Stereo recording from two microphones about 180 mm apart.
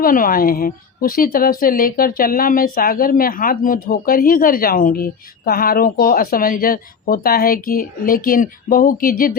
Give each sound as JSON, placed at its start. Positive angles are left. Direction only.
{"t": 0.0, "sound": "a woman's voice", "side_deg": 50}